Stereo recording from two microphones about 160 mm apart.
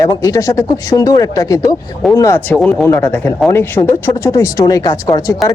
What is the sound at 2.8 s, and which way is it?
Speech, 15° left (ahead or behind).